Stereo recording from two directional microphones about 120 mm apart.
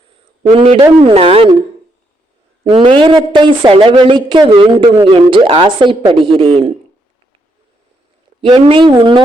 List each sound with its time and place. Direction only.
0.5 s a woman's voice: 50° right (ahead or behind)
2.6 s a woman's voice: 45° right (ahead or behind)
8.4 s a woman's voice: 45° right (ahead or behind)